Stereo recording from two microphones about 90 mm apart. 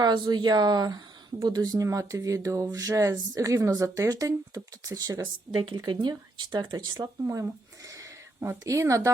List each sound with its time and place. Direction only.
0.0 s speech: 55° right (ahead or behind)
5.7 s speech: 55° right (ahead or behind)
7.3 s speech: 35° right (ahead or behind)